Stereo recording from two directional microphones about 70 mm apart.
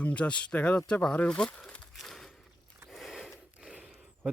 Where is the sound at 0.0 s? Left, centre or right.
Centre.